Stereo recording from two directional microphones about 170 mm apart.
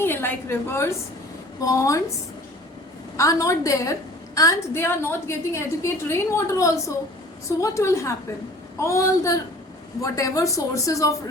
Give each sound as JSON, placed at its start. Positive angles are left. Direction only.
{"t": 0.0, "sound": "a woman's voice", "side_deg": 15}
{"t": 3.2, "sound": "a woman's voice", "side_deg": 20}